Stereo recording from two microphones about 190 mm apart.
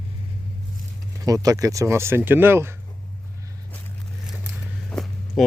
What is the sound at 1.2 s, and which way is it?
Speech, 20° right (ahead or behind).